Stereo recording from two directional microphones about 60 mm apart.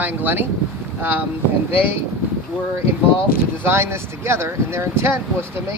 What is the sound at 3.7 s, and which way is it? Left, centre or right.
Speech, right.